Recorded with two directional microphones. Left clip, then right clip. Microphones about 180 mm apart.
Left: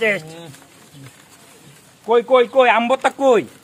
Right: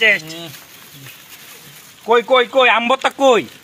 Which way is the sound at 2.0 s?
25° right (ahead or behind).